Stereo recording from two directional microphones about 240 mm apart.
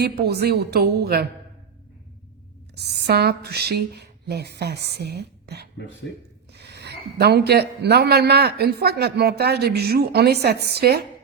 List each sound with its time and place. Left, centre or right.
0.0 s a man's voice: right
2.7 s a man's voice: right